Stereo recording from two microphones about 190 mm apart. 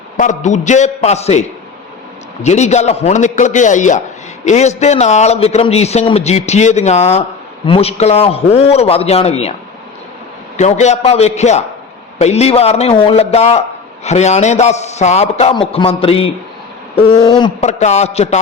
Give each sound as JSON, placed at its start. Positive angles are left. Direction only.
{"t": 0.2, "sound": "a man's voice", "side_deg": 40}
{"t": 10.6, "sound": "a man's voice", "side_deg": 35}
{"t": 17.1, "sound": "a sound", "side_deg": 25}
{"t": 17.6, "sound": "a man's voice", "side_deg": 35}